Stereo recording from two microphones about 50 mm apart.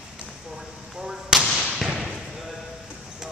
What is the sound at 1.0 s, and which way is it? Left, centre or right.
Basketball bounce, centre.